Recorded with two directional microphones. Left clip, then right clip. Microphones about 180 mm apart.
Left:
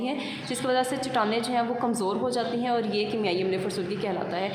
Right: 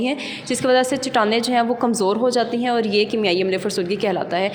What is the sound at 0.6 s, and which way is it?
A woman's voice, 35° right (ahead or behind).